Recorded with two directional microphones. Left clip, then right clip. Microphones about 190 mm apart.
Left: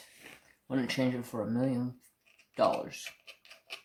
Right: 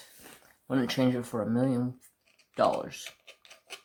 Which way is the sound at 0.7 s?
25° right (ahead or behind).